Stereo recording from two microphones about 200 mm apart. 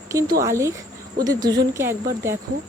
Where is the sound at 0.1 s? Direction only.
15° right (ahead or behind).